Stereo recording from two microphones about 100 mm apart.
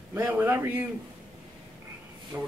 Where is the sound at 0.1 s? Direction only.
20° right (ahead or behind).